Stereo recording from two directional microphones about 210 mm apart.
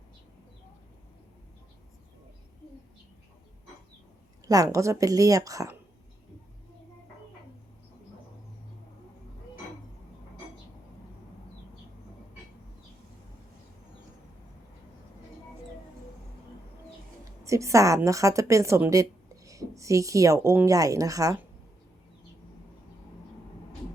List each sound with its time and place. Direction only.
4.4 s a woman's voice: 15° right (ahead or behind)
17.4 s a woman's voice: 15° right (ahead or behind)